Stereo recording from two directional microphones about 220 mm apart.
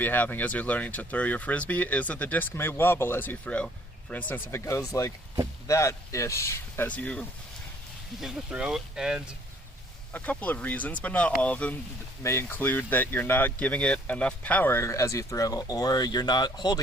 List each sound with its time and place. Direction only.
0.0 s speech: 10° left (ahead or behind)